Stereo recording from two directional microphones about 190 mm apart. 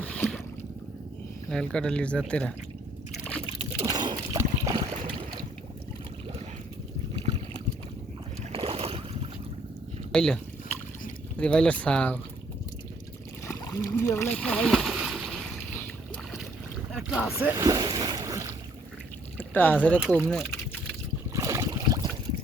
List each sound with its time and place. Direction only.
0.0 s a sound: 5° left (ahead or behind)
1.5 s speech: 5° left (ahead or behind)
3.8 s boat: 20° right (ahead or behind)
8.5 s boat: 30° right (ahead or behind)
10.1 s speech: 5° left (ahead or behind)
13.5 s splash: 15° left (ahead or behind)
16.9 s boat: 5° right (ahead or behind)
17.3 s speech: 15° right (ahead or behind)
19.4 s speech: 10° left (ahead or behind)
21.3 s boat: 15° right (ahead or behind)